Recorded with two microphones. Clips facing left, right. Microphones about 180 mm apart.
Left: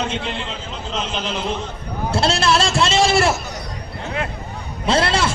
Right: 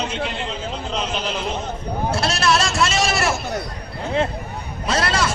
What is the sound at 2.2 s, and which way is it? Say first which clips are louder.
A man's voice: left 4 dB; 25° left (ahead or behind).